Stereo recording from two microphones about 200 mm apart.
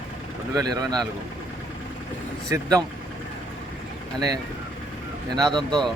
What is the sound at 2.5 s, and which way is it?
Speech, 20° right (ahead or behind).